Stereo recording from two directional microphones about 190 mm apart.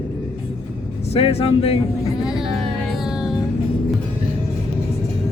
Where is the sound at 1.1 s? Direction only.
30° left (ahead or behind).